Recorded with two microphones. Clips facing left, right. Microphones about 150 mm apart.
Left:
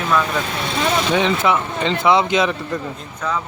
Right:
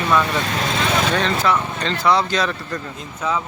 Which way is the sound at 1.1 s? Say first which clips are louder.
Left 2 dB; 20° left (ahead or behind).